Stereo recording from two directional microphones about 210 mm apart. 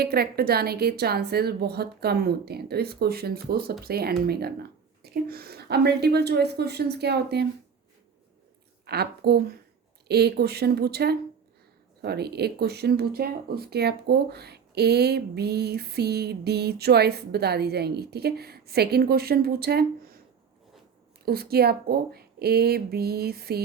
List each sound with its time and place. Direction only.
0.0 s speech: 50° right (ahead or behind)
8.9 s speech: 50° right (ahead or behind)
21.2 s speech: 50° right (ahead or behind)